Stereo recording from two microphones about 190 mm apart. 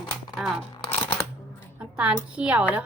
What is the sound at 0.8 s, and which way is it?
Shuffling cards, 25° left (ahead or behind).